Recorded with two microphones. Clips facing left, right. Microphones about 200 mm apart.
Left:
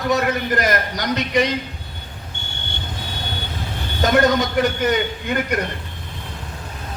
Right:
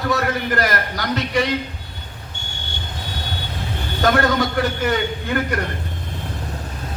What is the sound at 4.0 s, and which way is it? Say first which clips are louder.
A man's voice: left 1 dB; 20° left (ahead or behind).